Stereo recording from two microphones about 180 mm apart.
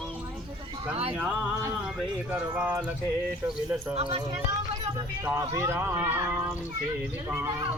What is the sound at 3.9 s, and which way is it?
Speech, 30° right (ahead or behind).